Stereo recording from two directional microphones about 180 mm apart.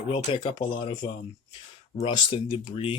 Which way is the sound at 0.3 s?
30° left (ahead or behind).